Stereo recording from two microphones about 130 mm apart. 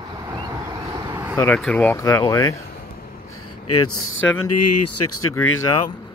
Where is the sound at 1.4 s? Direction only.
10° left (ahead or behind).